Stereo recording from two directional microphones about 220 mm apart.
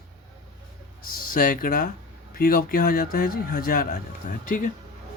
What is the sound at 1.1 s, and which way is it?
Speech, 40° left (ahead or behind).